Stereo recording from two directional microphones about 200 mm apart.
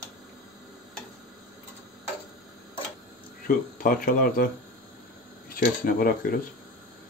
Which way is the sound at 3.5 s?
40° left (ahead or behind).